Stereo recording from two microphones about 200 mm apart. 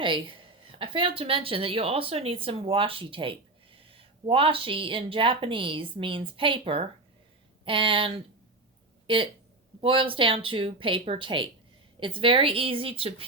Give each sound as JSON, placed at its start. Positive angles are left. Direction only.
{"t": 0.0, "sound": "a woman's voice", "side_deg": -25}